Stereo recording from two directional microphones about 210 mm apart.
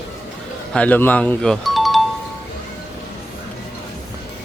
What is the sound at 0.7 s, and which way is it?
Speech, 5° left (ahead or behind).